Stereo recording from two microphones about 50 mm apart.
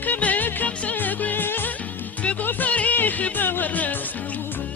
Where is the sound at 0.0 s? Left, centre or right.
Left.